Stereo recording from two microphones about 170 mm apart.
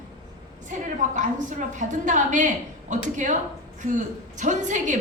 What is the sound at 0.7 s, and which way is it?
A woman's voice, 45° right (ahead or behind).